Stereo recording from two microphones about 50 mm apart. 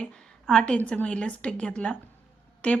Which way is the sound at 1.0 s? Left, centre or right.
Left.